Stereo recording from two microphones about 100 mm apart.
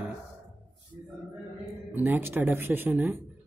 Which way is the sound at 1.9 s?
20° right (ahead or behind).